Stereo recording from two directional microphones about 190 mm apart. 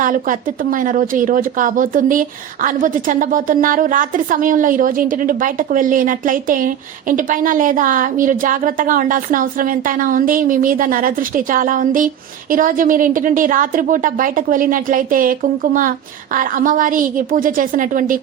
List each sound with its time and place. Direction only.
0.0 s speech: 45° right (ahead or behind)